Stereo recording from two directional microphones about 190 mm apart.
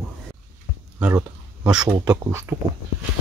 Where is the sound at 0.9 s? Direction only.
10° right (ahead or behind).